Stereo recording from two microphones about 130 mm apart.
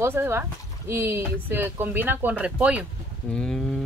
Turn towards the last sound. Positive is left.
turn(degrees=5)  # may be behind; listen again after turning